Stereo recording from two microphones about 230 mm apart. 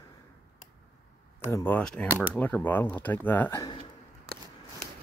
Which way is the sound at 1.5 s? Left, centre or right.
Centre.